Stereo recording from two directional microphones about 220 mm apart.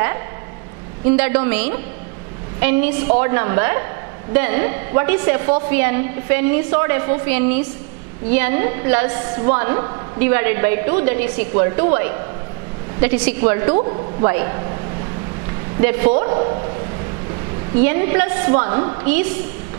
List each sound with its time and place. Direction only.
1.0 s a woman's voice: 10° right (ahead or behind)
13.7 s a woman's voice: 25° right (ahead or behind)
15.8 s a woman's voice: 10° right (ahead or behind)
16.3 s a sound: 25° right (ahead or behind)
17.7 s a woman's voice: 10° right (ahead or behind)